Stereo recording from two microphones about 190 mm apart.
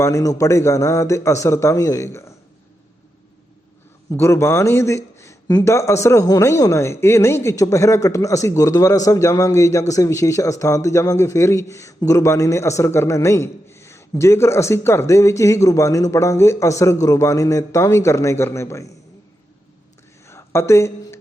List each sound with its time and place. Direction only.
0.0 s speech: 15° left (ahead or behind)
4.1 s speech: 15° left (ahead or behind)
20.2 s a sound: 15° left (ahead or behind)